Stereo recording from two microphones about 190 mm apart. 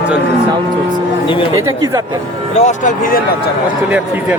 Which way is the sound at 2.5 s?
40° left (ahead or behind).